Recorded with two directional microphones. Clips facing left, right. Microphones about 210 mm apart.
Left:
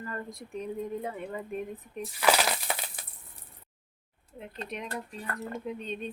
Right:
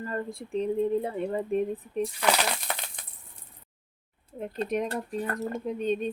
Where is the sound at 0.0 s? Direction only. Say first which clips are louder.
Right 5 dB; 30° right (ahead or behind).